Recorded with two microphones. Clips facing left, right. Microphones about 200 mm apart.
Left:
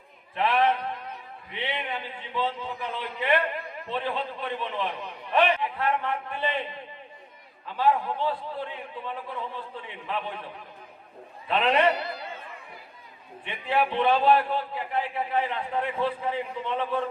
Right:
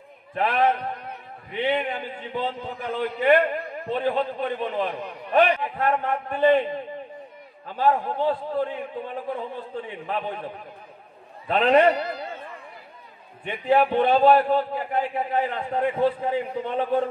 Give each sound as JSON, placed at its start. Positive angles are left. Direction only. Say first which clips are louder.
{"t": 0.3, "sound": "a man's voice", "louder": "right 2 dB", "side_deg": -45}
{"t": 7.6, "sound": "a man's voice", "louder": "right 2 dB", "side_deg": -45}
{"t": 11.4, "sound": "a man's voice", "louder": "right 5 dB", "side_deg": -45}
{"t": 13.5, "sound": "a man's voice", "louder": "right 6 dB", "side_deg": -45}